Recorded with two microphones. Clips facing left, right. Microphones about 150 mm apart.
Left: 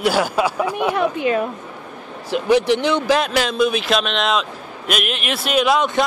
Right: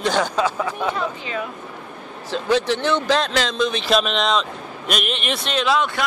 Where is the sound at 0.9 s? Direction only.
60° left (ahead or behind).